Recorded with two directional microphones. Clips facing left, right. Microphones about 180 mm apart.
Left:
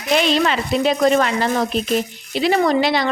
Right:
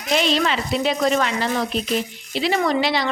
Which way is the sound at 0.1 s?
60° left (ahead or behind).